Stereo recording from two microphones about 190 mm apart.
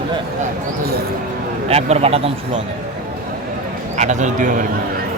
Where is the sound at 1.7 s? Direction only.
30° right (ahead or behind).